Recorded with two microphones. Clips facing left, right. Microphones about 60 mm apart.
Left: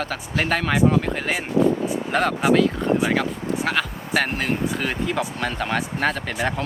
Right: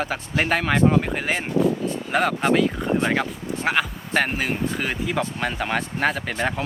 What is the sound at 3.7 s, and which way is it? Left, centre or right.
Speech, centre.